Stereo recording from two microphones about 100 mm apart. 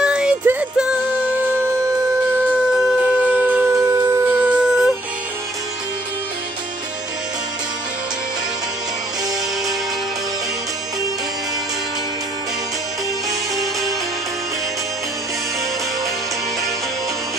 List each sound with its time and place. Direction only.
0.0 s music: 10° right (ahead or behind)
1.3 s music: 20° right (ahead or behind)
2.3 s shofar: 15° right (ahead or behind)
3.7 s shofar: 30° right (ahead or behind)
4.1 s music: 15° right (ahead or behind)